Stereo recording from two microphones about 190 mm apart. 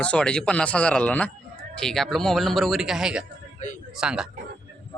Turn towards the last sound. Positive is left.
turn(degrees=-5)  # may be behind; listen again after turning